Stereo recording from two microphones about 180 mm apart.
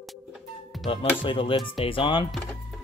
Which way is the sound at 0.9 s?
30° left (ahead or behind).